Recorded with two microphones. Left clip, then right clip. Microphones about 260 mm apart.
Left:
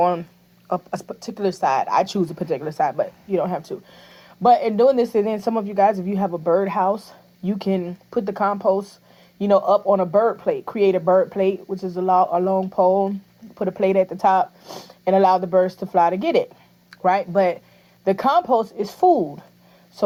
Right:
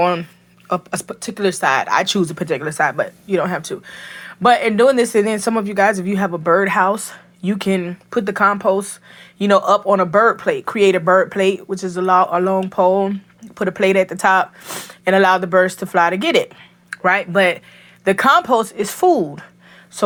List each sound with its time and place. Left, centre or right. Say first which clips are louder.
0.0 s speech: right 2 dB; right